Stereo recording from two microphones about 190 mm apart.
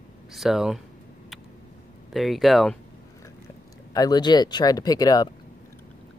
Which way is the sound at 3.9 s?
20° left (ahead or behind).